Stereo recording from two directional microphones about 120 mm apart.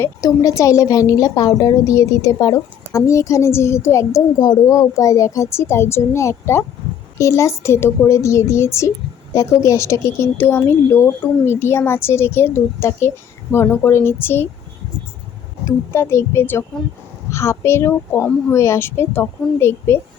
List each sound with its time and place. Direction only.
0.0 s a woman's voice: 30° left (ahead or behind)
4.4 s speech: 40° left (ahead or behind)
4.6 s a woman's voice: 25° left (ahead or behind)
15.6 s a woman's voice: 20° left (ahead or behind)